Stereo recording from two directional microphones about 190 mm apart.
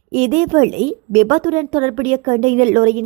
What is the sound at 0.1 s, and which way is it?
A woman's voice, 40° right (ahead or behind).